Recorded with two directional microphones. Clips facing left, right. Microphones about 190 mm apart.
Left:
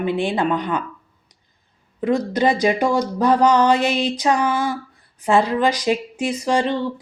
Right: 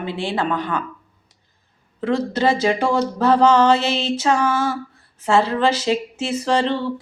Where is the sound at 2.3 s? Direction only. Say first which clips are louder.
Even; 15° left (ahead or behind).